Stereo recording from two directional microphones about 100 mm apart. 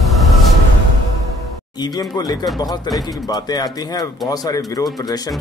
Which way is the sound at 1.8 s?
40° left (ahead or behind).